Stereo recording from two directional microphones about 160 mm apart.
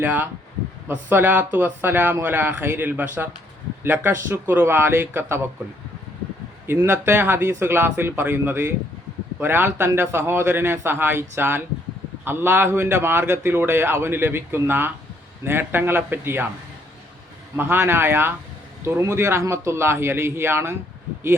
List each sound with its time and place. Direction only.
0.0 s a man's voice: 10° right (ahead or behind)
6.7 s a man's voice: 15° right (ahead or behind)
17.6 s a man's voice: 15° right (ahead or behind)